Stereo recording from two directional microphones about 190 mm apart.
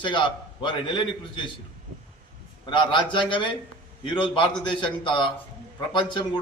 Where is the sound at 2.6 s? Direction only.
25° left (ahead or behind).